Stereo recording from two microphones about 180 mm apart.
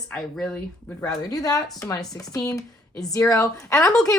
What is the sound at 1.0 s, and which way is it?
A woman's voice, 20° left (ahead or behind).